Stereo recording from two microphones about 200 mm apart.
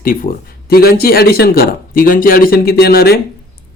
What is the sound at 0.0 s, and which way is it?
Speech, 45° left (ahead or behind).